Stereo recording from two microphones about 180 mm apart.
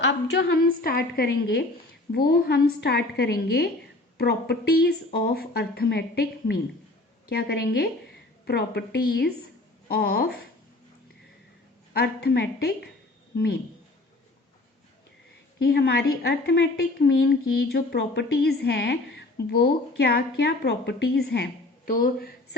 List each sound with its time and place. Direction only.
0.0 s a woman's voice: 80° left; by 10.4 s 55° left (ahead or behind)
11.9 s a woman's voice: 60° left (ahead or behind)
15.5 s a woman's voice: 65° left (ahead or behind)